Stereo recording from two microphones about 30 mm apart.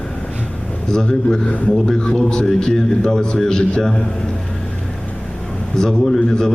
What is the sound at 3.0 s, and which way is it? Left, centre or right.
Speech, left.